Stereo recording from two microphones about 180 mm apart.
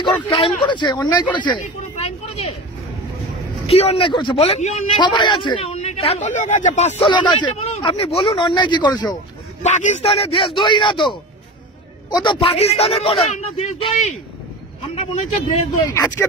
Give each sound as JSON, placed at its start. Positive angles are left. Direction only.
{"t": 0.0, "sound": "speech", "side_deg": 30}
{"t": 1.3, "sound": "a sound", "side_deg": 25}
{"t": 3.6, "sound": "a man's voice", "side_deg": 35}
{"t": 5.0, "sound": "a man's voice", "side_deg": 25}
{"t": 7.0, "sound": "speech", "side_deg": 25}
{"t": 9.6, "sound": "a man's voice", "side_deg": 40}
{"t": 15.9, "sound": "speech", "side_deg": 15}